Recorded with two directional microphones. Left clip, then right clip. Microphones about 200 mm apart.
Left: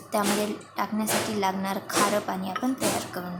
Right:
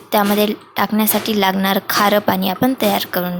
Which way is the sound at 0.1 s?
30° right (ahead or behind).